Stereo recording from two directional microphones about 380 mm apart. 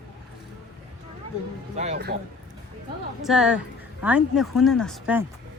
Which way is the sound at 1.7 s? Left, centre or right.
Centre.